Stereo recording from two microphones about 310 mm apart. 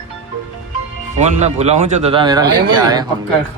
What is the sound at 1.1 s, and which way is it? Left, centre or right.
Speech, right.